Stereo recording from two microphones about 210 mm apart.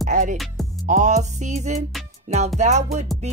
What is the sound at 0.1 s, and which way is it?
Music, 35° right (ahead or behind).